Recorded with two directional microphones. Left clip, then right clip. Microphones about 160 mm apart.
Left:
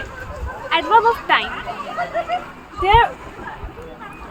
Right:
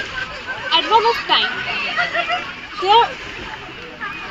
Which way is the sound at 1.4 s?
40° left (ahead or behind).